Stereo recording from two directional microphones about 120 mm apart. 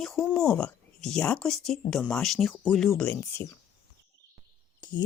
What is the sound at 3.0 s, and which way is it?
Speech, 15° left (ahead or behind).